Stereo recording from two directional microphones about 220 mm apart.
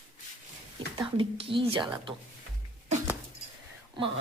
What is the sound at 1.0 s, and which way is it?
Speech, 25° right (ahead or behind).